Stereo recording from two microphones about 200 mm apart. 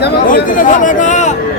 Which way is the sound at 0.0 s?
50° left (ahead or behind).